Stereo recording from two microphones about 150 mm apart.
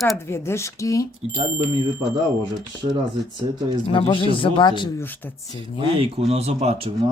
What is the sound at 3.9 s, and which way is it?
Speech, 35° left (ahead or behind).